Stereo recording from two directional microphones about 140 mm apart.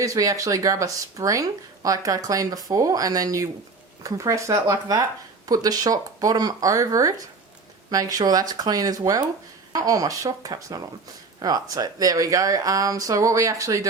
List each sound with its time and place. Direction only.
0.0 s speech: 25° right (ahead or behind)